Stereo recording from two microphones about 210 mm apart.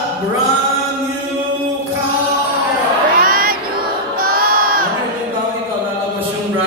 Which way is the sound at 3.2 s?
45° right (ahead or behind).